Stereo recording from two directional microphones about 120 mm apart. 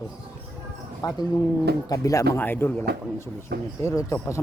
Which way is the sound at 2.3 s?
15° left (ahead or behind).